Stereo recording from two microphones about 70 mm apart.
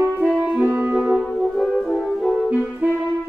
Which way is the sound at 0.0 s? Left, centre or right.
Right.